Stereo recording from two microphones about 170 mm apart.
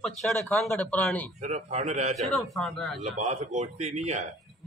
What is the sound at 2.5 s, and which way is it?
Speech, centre (ahead or behind).